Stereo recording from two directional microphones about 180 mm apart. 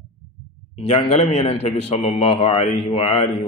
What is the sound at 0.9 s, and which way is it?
A man's voice, 30° left (ahead or behind).